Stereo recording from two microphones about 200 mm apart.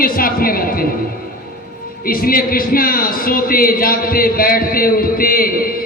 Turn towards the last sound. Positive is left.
turn(degrees=45)  # may be behind; listen again after turning